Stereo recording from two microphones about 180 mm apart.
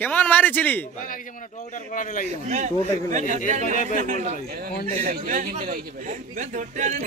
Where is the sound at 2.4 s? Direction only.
40° right (ahead or behind).